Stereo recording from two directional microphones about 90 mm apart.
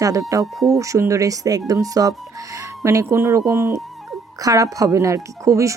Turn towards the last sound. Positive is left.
turn(degrees=-35)  # may be behind; listen again after turning